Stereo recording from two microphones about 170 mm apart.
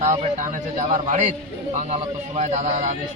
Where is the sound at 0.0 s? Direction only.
45° right (ahead or behind).